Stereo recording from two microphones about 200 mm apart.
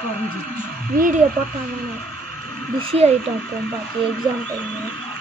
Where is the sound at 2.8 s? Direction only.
30° right (ahead or behind).